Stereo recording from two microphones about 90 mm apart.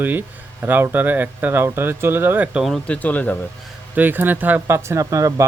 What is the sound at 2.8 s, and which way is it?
Speech, 15° left (ahead or behind).